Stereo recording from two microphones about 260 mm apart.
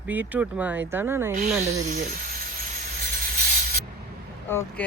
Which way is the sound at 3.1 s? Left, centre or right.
Right.